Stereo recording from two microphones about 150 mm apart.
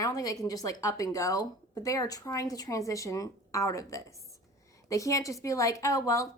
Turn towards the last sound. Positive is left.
turn(degrees=20)  # may be behind; listen again after turning